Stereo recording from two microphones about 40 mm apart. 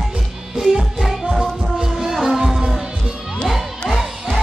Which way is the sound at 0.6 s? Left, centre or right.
Centre.